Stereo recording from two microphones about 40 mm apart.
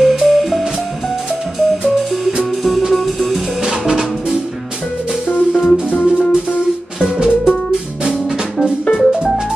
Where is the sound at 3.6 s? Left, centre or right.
Centre.